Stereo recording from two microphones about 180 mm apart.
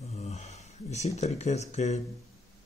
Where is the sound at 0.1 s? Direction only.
40° left (ahead or behind).